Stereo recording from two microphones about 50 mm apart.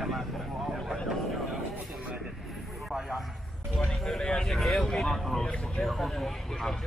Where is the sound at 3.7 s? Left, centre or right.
Centre.